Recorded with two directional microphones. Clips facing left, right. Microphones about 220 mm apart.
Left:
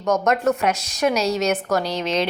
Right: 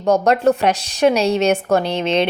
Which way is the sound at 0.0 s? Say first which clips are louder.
Right 5 dB; 30° right (ahead or behind).